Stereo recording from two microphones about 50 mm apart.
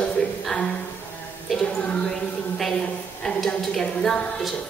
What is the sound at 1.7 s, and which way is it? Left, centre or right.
Speech, left.